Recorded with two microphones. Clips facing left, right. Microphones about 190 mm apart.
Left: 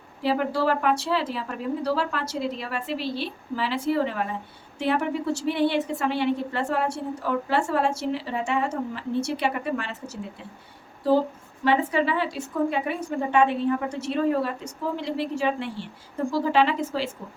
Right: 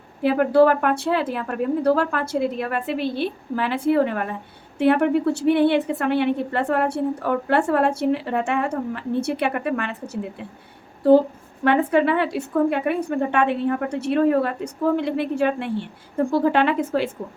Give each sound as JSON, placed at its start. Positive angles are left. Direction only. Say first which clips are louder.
{"t": 0.2, "sound": "a woman's voice", "louder": "right 8 dB", "side_deg": -55}
{"t": 11.6, "sound": "a woman's voice", "louder": "right 4 dB", "side_deg": -55}